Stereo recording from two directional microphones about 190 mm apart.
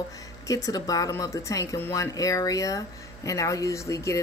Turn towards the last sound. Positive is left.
turn(degrees=15)  # may be behind; listen again after turning